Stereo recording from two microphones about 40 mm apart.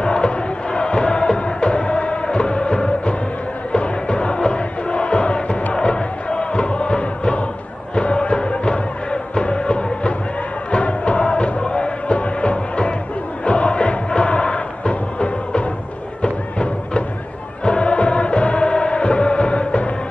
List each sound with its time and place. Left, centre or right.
0.0 s crowd: left
0.7 s music: left